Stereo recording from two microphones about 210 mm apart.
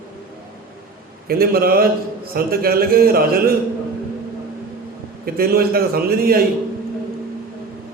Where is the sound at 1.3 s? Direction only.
45° right (ahead or behind).